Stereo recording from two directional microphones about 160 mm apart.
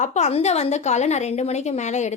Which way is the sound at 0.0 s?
45° left (ahead or behind).